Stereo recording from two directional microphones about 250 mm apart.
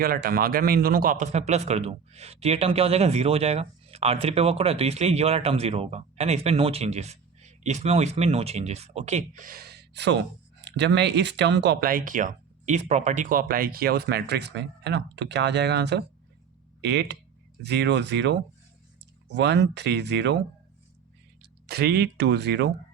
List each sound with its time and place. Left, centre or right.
0.0 s a man's voice: right
21.7 s speech: right